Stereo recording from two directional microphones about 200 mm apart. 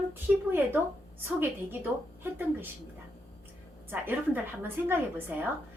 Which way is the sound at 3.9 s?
10° right (ahead or behind).